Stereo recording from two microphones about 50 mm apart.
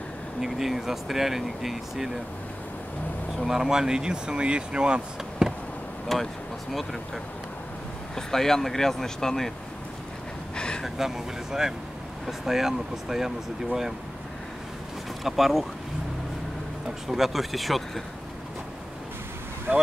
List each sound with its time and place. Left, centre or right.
0.4 s speech: centre
3.4 s speech: centre
6.1 s speech: centre
8.3 s speech: centre
10.5 s a sound: centre
11.0 s speech: centre
15.2 s speech: centre
17.1 s speech: centre